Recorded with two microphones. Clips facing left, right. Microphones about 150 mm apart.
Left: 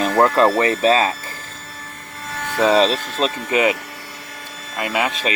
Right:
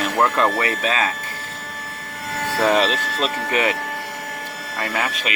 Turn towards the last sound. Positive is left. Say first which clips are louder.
# left 3 dB
turn(degrees=20)  # may be behind; listen again after turning